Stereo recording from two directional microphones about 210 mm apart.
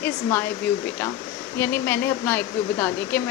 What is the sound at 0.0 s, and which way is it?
Speech, 10° left (ahead or behind).